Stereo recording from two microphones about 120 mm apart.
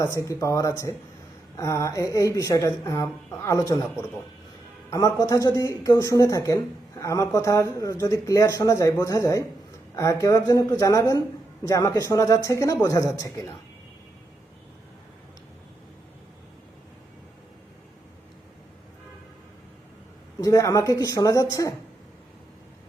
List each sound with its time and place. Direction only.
0.0 s speech: 25° left (ahead or behind)
4.9 s speech: 25° left (ahead or behind)
20.4 s speech: 30° left (ahead or behind)